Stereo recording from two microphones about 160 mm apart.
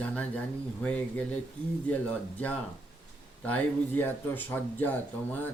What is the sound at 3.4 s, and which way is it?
Speech, 10° left (ahead or behind).